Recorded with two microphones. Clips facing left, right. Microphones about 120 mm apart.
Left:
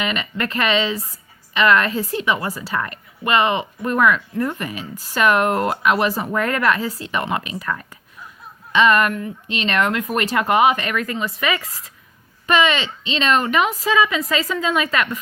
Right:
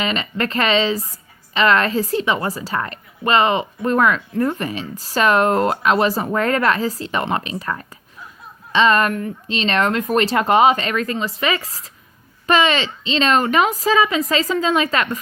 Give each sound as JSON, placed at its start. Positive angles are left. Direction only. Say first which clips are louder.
{"t": 0.0, "sound": "a woman's voice", "louder": "right 2 dB", "side_deg": -30}